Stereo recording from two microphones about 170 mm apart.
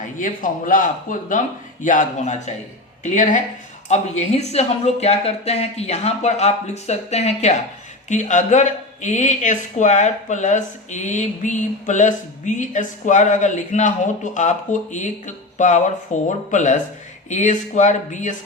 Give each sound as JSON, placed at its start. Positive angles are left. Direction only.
{"t": 0.2, "sound": "speech", "side_deg": 50}